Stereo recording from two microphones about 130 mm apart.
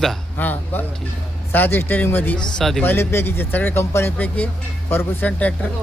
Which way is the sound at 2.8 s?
15° left (ahead or behind).